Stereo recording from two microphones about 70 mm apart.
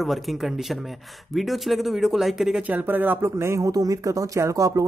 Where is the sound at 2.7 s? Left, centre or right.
Right.